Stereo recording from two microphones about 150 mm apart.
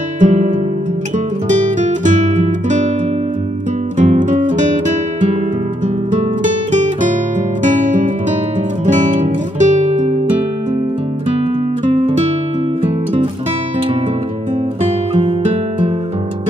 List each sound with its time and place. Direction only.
0.2 s music: 55° right (ahead or behind)
4.0 s guitar: 55° right (ahead or behind)
6.7 s music: 55° right (ahead or behind)
9.6 s guitar: 55° right (ahead or behind)
14.8 s music: 40° right (ahead or behind)